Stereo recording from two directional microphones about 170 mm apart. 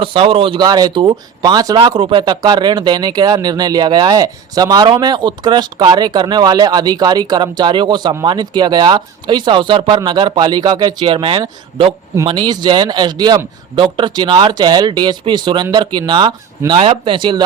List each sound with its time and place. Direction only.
0.0 s speech: 30° right (ahead or behind)